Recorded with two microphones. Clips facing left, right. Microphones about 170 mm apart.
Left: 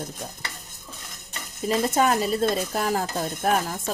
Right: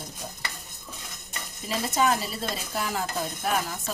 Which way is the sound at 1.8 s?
55° left (ahead or behind).